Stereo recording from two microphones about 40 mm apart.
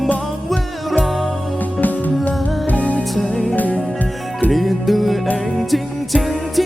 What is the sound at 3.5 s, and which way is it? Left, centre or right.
Music, left.